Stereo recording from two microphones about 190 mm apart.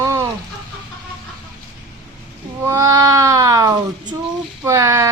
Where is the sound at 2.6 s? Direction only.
15° right (ahead or behind).